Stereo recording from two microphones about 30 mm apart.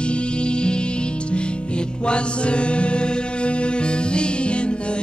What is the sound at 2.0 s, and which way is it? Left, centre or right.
Music, left.